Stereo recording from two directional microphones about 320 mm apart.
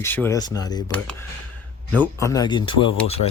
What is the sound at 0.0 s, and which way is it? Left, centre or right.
Speech, centre.